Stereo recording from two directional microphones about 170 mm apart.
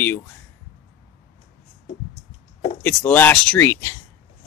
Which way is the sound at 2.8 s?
10° left (ahead or behind).